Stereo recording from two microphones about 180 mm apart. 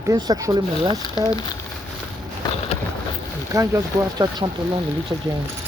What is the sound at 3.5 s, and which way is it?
Speech, 20° right (ahead or behind).